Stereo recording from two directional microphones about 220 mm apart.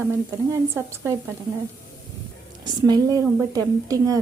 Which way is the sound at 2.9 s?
15° right (ahead or behind).